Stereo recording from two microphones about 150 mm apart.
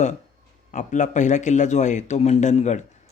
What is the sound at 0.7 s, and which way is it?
A man's voice, 55° left (ahead or behind).